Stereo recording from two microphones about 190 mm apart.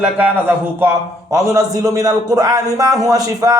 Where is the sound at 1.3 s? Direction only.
20° right (ahead or behind).